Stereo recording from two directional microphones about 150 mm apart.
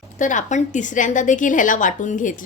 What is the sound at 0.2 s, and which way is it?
A woman's voice, 55° left (ahead or behind).